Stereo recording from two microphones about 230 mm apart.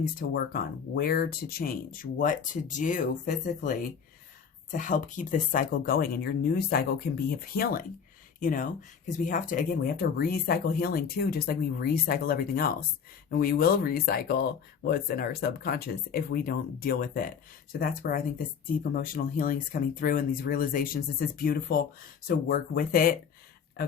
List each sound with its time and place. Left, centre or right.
0.2 s speech: left